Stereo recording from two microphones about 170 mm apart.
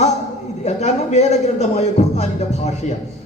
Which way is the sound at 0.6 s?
40° left (ahead or behind).